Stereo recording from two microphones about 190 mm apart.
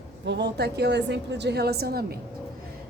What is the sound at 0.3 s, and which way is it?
A woman's voice, 65° right (ahead or behind).